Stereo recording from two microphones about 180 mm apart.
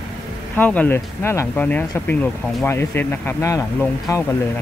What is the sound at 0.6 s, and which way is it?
Speech, 10° left (ahead or behind).